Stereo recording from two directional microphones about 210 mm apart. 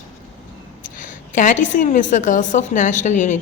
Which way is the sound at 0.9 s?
40° left (ahead or behind).